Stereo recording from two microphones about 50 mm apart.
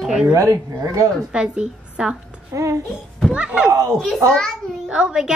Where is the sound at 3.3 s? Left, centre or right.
Right.